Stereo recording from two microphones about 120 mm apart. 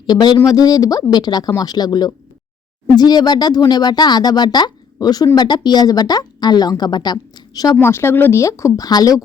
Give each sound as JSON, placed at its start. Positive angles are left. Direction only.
{"t": 0.1, "sound": "speech", "side_deg": 35}
{"t": 7.8, "sound": "speech", "side_deg": 20}